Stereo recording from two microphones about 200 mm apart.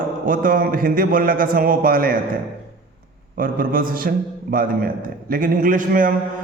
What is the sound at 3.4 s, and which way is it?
A man's voice, 45° right (ahead or behind).